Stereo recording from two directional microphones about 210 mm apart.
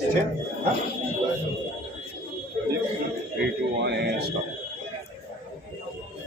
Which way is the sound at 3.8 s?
50° right (ahead or behind).